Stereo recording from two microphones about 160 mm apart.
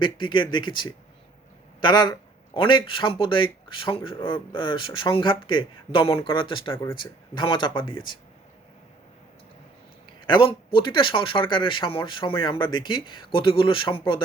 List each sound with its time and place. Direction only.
0.0 s speech: 30° left (ahead or behind)
10.2 s speech: 30° left (ahead or behind)